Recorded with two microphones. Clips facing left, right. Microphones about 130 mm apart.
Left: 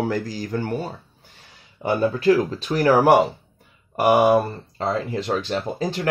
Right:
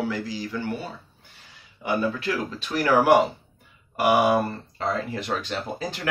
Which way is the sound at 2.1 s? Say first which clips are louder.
Left 10 dB; 40° left (ahead or behind).